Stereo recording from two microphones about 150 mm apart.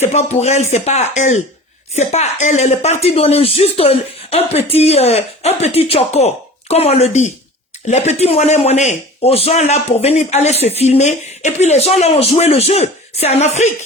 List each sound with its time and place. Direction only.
0.0 s a man's voice: 45° left (ahead or behind)